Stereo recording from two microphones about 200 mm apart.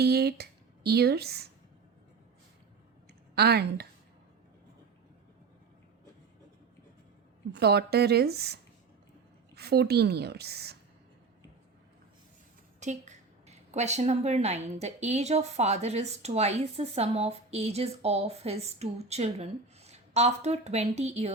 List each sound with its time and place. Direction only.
0.0 s speech: 55° right (ahead or behind)
3.3 s a woman's voice: 55° right (ahead or behind)
7.5 s a woman's voice: 55° right (ahead or behind)
9.6 s a woman's voice: 55° right (ahead or behind)
12.8 s a woman's voice: 35° right (ahead or behind)